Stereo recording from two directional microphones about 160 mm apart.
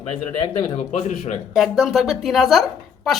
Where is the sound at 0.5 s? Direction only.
30° left (ahead or behind).